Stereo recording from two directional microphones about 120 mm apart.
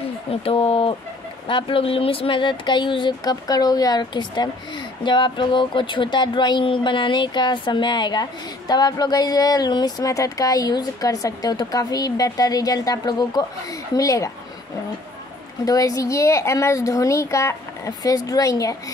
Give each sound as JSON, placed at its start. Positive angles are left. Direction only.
{"t": 0.3, "sound": "a woman's voice", "side_deg": 55}
{"t": 15.6, "sound": "a woman's voice", "side_deg": 30}